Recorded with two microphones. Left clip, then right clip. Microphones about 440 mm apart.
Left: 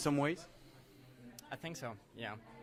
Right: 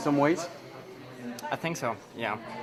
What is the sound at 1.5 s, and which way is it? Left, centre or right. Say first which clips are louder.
Speech: right 14 dB; left.